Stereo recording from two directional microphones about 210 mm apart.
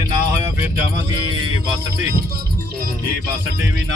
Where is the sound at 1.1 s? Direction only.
25° right (ahead or behind).